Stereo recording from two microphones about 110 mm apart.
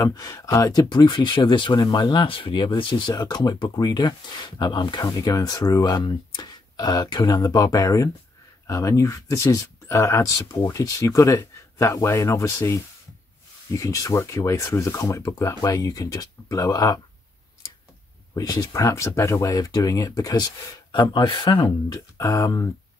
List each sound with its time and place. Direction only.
0.0 s speech: 30° left (ahead or behind)
18.3 s speech: 35° left (ahead or behind); by 21.7 s 50° left (ahead or behind)
21.8 s speech: 30° left (ahead or behind)